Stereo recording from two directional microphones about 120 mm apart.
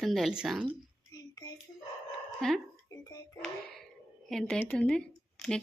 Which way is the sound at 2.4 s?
Centre (ahead or behind).